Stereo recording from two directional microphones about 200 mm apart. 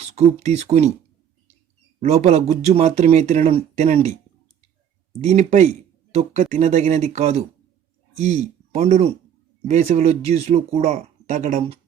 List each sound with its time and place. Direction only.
0.0 s speech: 35° right (ahead or behind)
2.0 s speech: 35° right (ahead or behind)
5.2 s speech: 35° right (ahead or behind)